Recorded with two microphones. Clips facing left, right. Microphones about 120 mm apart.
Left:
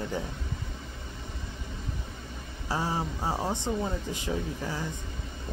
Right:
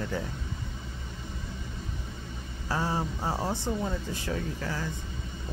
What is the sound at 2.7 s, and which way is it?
Speech, 15° left (ahead or behind).